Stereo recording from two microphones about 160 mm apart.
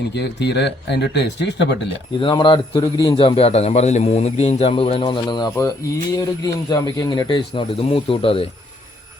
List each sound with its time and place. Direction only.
0.1 s speech: 90° left
2.1 s a man's voice: 30° left (ahead or behind)